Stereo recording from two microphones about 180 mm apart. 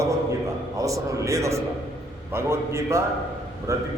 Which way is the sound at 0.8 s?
15° right (ahead or behind).